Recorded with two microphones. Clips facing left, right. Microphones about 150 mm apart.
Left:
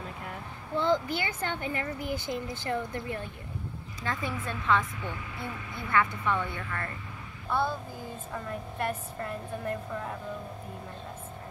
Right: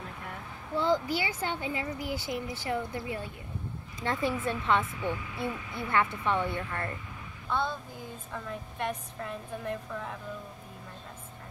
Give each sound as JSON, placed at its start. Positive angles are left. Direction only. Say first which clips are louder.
{"t": 0.7, "sound": "speech", "louder": "even", "side_deg": -10}
{"t": 2.0, "sound": "speech", "louder": "left 1 dB", "side_deg": 20}
{"t": 2.6, "sound": "speech", "louder": "even", "side_deg": -15}
{"t": 4.0, "sound": "a woman's voice", "louder": "right 4 dB", "side_deg": -25}
{"t": 7.4, "sound": "a sound", "louder": "left 2 dB", "side_deg": 5}
{"t": 8.3, "sound": "a woman's voice", "louder": "left 2 dB", "side_deg": 5}